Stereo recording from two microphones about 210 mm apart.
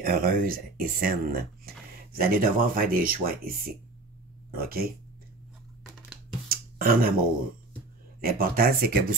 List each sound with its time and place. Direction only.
0.0 s speech: 45° right (ahead or behind)
6.5 s a sound: 45° right (ahead or behind)
8.2 s speech: 45° right (ahead or behind)